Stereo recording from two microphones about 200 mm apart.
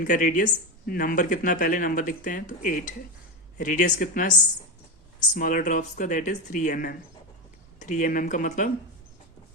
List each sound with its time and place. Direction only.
0.0 s speech: 40° left (ahead or behind)